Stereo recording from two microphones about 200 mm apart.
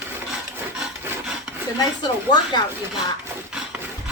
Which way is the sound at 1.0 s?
5° right (ahead or behind).